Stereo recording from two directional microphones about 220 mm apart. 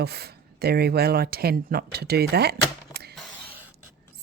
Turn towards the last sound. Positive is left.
turn(degrees=-45)  # may be behind; listen again after turning